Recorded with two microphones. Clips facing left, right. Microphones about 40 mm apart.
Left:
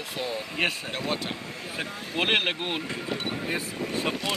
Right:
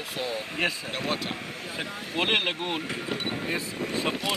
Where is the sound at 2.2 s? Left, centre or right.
Centre.